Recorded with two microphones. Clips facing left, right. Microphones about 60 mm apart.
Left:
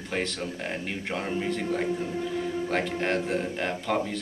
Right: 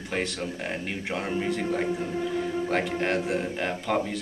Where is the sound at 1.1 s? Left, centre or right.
Centre.